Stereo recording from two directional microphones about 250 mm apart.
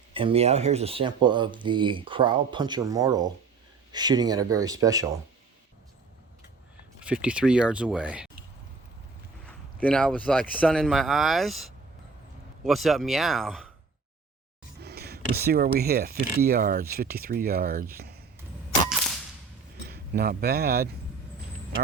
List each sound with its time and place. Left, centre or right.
0.1 s speech: right
7.0 s speech: centre
9.8 s speech: centre
14.8 s speech: right
18.9 s whip: centre
19.8 s speech: right